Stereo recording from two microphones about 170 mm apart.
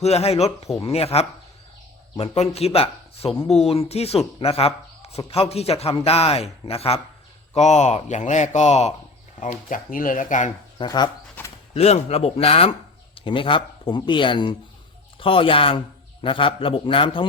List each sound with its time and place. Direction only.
0.0 s a man's voice: 40° left (ahead or behind)
10.8 s speech: 25° left (ahead or behind)
11.4 s a sound: 10° left (ahead or behind)
11.7 s a man's voice: 40° left (ahead or behind)